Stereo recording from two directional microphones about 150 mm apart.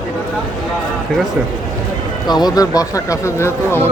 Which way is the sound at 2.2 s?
25° left (ahead or behind).